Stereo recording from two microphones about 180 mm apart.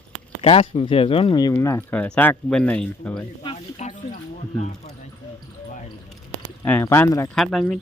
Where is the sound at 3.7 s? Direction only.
40° left (ahead or behind).